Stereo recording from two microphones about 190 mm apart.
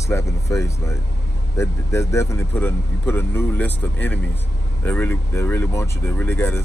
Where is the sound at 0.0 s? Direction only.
15° left (ahead or behind).